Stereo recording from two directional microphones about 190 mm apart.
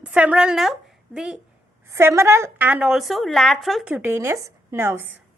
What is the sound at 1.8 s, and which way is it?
A woman's voice, 15° right (ahead or behind).